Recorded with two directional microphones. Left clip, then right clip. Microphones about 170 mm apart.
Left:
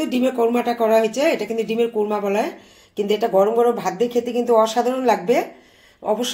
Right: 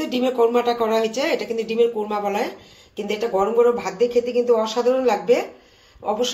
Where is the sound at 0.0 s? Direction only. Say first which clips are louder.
Even; 65° left (ahead or behind).